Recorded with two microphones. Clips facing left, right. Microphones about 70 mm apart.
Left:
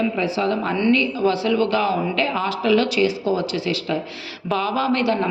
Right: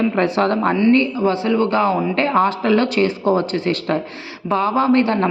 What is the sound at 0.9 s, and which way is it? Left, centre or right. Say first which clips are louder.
A man's voice: right 3 dB; right.